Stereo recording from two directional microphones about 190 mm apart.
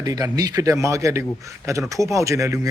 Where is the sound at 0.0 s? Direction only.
20° right (ahead or behind).